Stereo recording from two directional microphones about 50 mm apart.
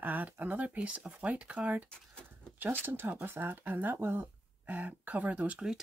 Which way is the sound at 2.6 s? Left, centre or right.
Right.